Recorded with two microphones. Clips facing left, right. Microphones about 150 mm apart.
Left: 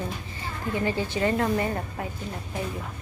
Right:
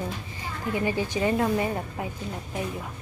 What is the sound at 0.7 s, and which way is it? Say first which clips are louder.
A woman's voice: even; 15° right (ahead or behind).